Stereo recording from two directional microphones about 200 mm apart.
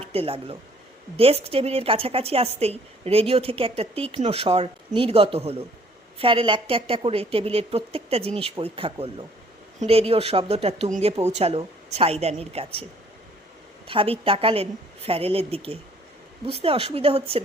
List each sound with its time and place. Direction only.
0.0 s a woman's voice: 30° right (ahead or behind)
13.8 s a woman's voice: 25° right (ahead or behind)